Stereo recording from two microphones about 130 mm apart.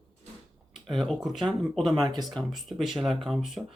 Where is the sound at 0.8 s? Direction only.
Centre (ahead or behind).